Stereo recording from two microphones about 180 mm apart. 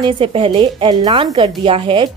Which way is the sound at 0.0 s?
30° right (ahead or behind).